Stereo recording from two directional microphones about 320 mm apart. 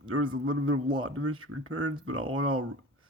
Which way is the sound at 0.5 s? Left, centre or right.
Right.